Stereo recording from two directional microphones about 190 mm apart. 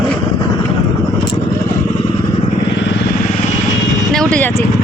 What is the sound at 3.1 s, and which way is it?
Vehicle, 45° left (ahead or behind).